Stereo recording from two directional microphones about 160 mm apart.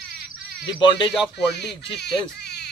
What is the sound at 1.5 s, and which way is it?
Speech, 90° left.